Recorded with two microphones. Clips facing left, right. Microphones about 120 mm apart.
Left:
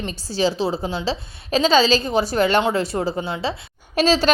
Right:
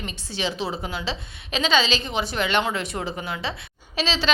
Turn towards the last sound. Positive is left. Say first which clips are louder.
# left 8 dB
turn(degrees=45)  # may be behind; listen again after turning